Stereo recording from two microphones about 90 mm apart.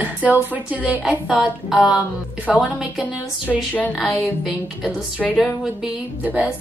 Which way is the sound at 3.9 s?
5° right (ahead or behind).